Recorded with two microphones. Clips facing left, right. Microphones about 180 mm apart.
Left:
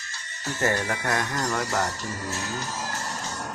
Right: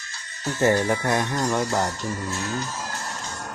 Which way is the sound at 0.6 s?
25° right (ahead or behind).